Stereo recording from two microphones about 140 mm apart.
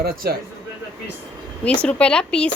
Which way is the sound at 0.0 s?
90° right.